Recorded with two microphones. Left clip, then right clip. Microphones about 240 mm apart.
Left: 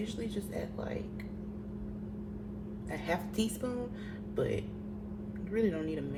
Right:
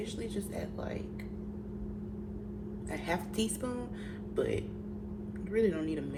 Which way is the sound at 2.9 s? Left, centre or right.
Right.